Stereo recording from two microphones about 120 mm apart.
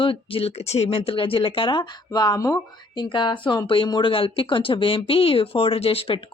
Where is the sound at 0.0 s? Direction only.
50° left (ahead or behind).